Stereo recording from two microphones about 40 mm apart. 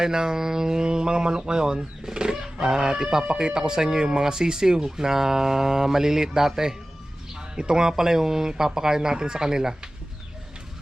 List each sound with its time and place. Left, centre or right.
0.0 s speech: centre